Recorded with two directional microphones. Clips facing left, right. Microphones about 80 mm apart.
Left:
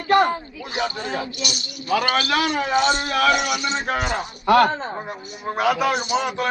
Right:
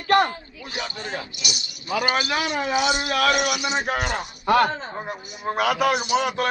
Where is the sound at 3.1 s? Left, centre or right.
Left.